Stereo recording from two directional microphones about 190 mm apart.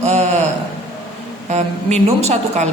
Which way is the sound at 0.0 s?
35° right (ahead or behind).